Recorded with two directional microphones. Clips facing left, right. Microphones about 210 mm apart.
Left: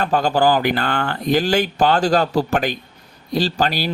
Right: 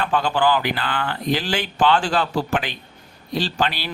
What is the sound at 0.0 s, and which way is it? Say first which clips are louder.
A man's voice: left 3 dB; 40° left (ahead or behind).